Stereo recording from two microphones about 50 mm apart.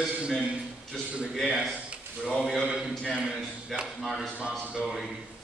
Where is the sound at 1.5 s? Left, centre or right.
Centre.